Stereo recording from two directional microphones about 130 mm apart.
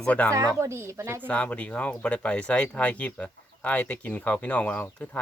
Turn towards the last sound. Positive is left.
turn(degrees=10)  # may be behind; listen again after turning